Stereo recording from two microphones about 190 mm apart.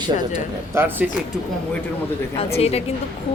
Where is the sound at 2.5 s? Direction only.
35° left (ahead or behind).